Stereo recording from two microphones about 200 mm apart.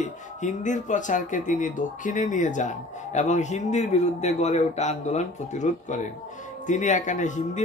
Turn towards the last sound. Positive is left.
turn(degrees=35)  # may be behind; listen again after turning